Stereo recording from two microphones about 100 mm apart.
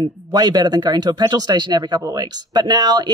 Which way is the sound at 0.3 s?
40° right (ahead or behind).